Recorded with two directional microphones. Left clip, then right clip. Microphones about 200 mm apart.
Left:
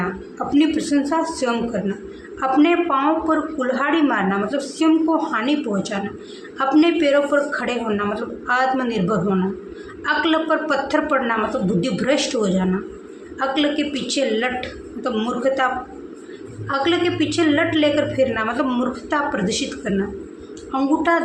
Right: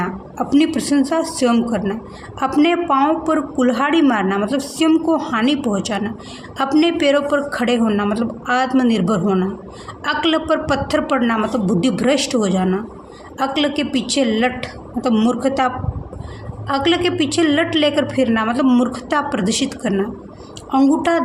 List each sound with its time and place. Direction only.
0.3 s a woman's voice: 55° right (ahead or behind)